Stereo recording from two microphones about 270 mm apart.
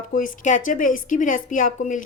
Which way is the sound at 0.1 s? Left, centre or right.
Left.